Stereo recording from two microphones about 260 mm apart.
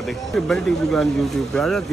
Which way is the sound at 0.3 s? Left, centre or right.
Centre.